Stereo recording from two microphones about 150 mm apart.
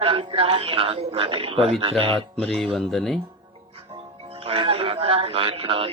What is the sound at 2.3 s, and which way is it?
Speech, 5° left (ahead or behind).